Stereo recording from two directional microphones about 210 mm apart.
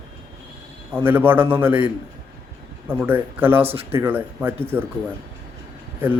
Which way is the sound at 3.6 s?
30° right (ahead or behind).